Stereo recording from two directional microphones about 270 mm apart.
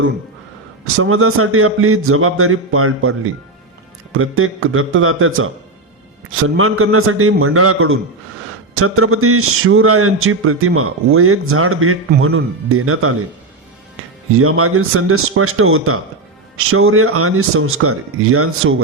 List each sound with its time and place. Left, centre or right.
0.9 s speech: right
6.6 s speech: right
14.3 s speech: right